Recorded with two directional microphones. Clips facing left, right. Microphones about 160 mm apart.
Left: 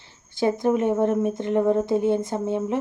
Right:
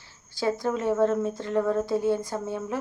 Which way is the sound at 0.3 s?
20° left (ahead or behind).